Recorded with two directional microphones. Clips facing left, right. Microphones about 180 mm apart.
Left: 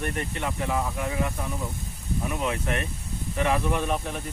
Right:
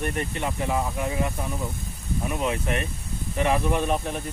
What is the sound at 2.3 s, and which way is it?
Speech, 20° right (ahead or behind).